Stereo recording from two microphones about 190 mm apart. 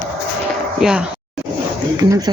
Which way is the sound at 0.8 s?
5° right (ahead or behind).